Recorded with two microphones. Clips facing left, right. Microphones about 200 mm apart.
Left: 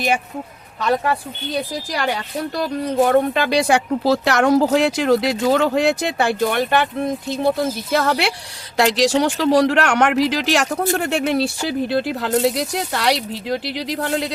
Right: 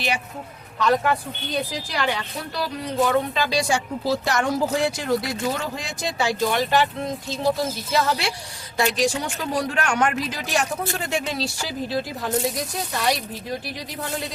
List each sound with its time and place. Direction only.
1.9 s speech: 40° left (ahead or behind); by 8.3 s 60° left (ahead or behind)
8.8 s speech: 80° left